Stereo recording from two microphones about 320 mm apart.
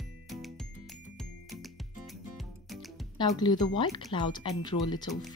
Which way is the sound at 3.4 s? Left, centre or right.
Centre.